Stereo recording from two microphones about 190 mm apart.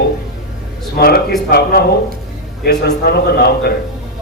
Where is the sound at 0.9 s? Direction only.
55° left (ahead or behind).